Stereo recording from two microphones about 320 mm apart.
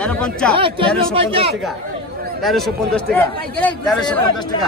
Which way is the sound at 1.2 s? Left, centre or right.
Centre.